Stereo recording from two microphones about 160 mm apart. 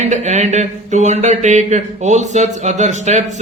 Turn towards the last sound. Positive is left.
turn(degrees=-45)  # may be behind; listen again after turning